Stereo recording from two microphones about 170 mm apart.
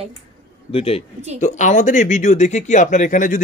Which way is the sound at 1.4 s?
45° left (ahead or behind).